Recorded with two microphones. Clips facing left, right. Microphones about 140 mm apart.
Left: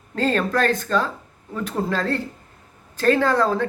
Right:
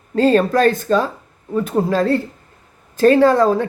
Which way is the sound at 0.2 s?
15° right (ahead or behind).